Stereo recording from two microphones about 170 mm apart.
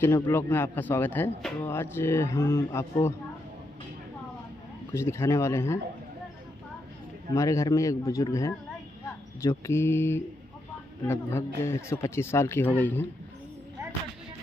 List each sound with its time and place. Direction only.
0.0 s speech: 15° left (ahead or behind)
4.9 s speech: 15° left (ahead or behind)
7.3 s speech: 20° left (ahead or behind)